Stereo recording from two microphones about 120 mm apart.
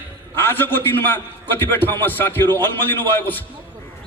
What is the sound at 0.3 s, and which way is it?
A man's voice, 20° left (ahead or behind).